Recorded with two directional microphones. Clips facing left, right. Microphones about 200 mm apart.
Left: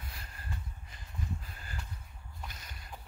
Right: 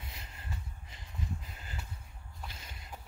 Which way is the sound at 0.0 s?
20° right (ahead or behind).